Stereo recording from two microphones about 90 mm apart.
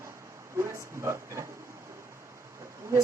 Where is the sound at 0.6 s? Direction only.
30° right (ahead or behind).